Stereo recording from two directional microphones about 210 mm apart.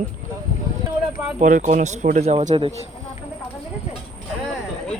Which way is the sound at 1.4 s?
35° right (ahead or behind).